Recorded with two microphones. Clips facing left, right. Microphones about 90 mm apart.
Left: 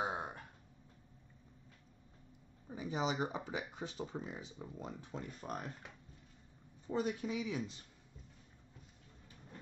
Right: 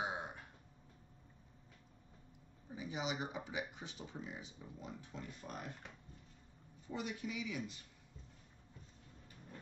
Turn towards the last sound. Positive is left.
turn(degrees=30)  # may be behind; listen again after turning